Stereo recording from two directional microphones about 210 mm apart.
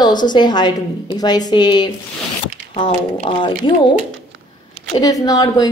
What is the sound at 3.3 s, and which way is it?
Speech, 25° left (ahead or behind).